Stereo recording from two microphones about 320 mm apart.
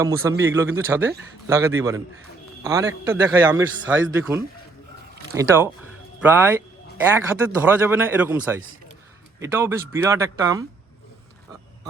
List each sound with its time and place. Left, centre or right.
0.0 s speech: centre